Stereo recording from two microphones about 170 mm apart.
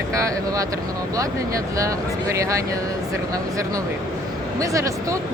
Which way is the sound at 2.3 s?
15° right (ahead or behind).